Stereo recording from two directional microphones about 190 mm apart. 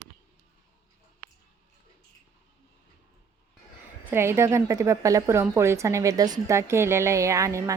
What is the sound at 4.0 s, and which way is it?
A woman's voice, 10° right (ahead or behind).